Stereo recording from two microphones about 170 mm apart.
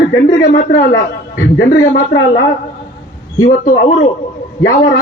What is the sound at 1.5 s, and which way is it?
Speech, 65° left (ahead or behind).